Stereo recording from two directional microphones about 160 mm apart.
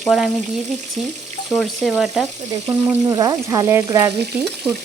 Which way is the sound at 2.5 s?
20° right (ahead or behind).